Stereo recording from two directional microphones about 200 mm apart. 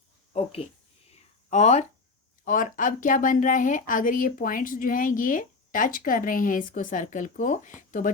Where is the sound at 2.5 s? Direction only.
40° left (ahead or behind).